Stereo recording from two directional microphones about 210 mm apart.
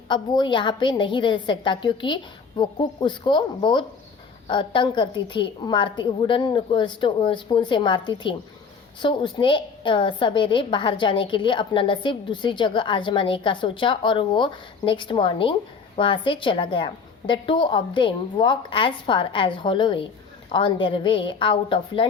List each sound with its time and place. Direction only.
0.1 s a woman's voice: 20° left (ahead or behind)